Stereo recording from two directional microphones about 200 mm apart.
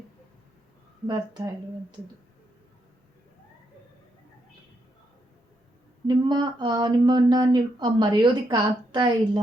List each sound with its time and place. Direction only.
1.0 s speech: 25° right (ahead or behind)
6.1 s speech: 20° right (ahead or behind)